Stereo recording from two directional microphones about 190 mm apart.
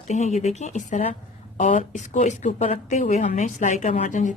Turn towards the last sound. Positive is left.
turn(degrees=40)  # may be behind; listen again after turning